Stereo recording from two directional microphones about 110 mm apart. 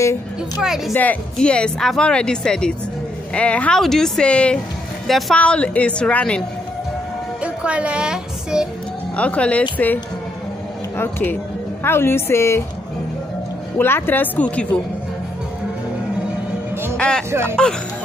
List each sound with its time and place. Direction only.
0.6 s speech: 5° right (ahead or behind)
0.9 s speech: 10° left (ahead or behind)
7.4 s speech: 10° right (ahead or behind)
9.1 s speech: 10° left (ahead or behind)
11.0 s a woman's voice: 20° left (ahead or behind)
13.7 s speech: 20° left (ahead or behind)
16.9 s music: 5° left (ahead or behind)
17.3 s speech: 25° right (ahead or behind)